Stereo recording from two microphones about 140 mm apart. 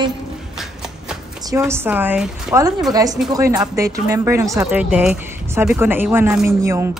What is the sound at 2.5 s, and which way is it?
Speech, 25° right (ahead or behind).